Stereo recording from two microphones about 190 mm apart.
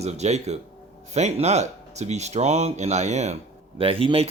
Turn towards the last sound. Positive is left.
turn(degrees=-30)  # may be behind; listen again after turning